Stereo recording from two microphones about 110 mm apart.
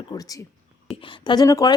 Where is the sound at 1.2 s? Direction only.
35° left (ahead or behind).